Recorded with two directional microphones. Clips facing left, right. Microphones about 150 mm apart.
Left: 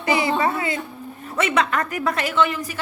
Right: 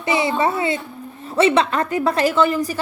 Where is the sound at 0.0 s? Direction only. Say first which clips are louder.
Right 1 dB; 25° right (ahead or behind).